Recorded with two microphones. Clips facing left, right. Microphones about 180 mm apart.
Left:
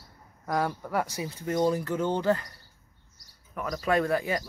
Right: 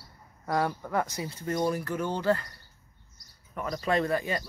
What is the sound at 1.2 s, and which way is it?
Speech, 15° left (ahead or behind).